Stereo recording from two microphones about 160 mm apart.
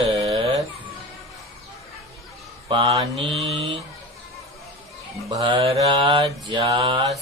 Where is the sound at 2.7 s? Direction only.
35° right (ahead or behind).